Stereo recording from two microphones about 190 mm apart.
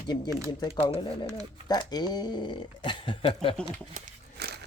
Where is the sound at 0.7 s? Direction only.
25° left (ahead or behind).